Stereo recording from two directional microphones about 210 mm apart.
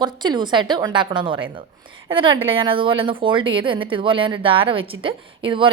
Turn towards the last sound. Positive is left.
turn(degrees=-25)  # may be behind; listen again after turning